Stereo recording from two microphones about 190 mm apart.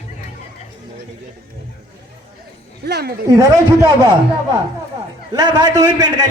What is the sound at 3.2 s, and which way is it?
Speech, 20° right (ahead or behind).